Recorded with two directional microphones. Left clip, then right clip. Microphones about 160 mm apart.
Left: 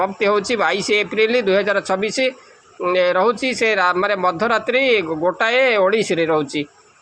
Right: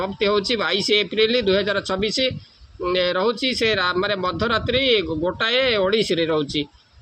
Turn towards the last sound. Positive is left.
turn(degrees=-25)  # may be behind; listen again after turning